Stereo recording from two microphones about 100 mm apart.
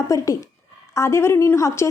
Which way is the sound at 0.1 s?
35° left (ahead or behind).